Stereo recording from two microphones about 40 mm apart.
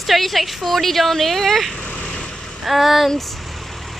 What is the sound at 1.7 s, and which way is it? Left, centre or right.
Vehicle, left.